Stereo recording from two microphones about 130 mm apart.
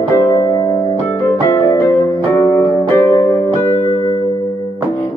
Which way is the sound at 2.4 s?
20° left (ahead or behind).